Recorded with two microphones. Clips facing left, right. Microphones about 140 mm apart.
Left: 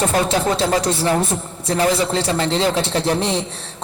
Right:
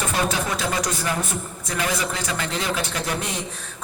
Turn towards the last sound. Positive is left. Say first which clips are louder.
# left 8 dB
turn(degrees=30)  # may be behind; listen again after turning